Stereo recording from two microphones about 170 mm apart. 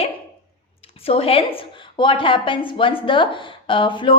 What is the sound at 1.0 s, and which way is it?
A woman's voice, 35° left (ahead or behind).